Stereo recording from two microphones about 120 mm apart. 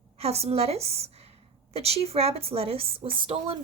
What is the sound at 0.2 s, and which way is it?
A woman's voice, 60° right (ahead or behind).